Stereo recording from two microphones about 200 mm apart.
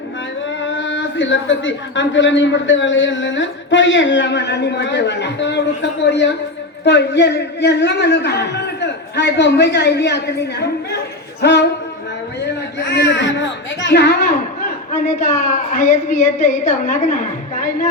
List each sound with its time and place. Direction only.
0.6 s a man's voice: 70° left (ahead or behind)
12.8 s a child's voice: 55° left (ahead or behind)
15.4 s a woman's voice: 40° left (ahead or behind)